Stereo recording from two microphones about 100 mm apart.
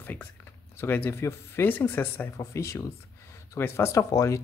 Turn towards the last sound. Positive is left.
turn(degrees=35)  # may be behind; listen again after turning